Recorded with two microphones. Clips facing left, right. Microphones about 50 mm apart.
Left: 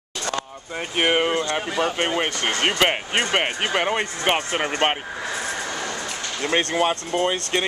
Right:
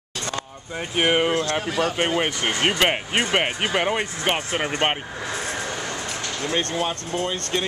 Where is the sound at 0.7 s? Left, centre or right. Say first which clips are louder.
Even; centre.